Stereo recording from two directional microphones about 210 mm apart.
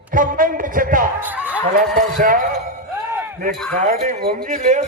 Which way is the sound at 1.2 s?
10° right (ahead or behind).